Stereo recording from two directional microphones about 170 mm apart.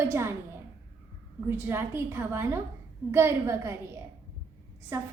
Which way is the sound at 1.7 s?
15° right (ahead or behind).